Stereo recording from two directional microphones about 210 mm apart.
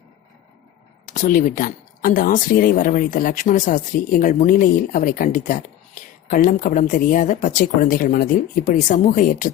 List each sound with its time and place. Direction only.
1.0 s speech: 35° left (ahead or behind)